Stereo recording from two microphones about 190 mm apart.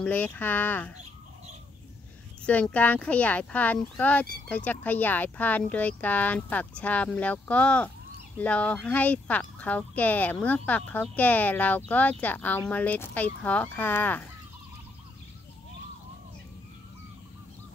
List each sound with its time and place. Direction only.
0.0 s speech: 10° left (ahead or behind)
2.4 s speech: 5° left (ahead or behind)